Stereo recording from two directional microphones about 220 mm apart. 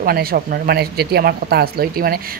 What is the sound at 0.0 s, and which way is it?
Speech, 40° right (ahead or behind).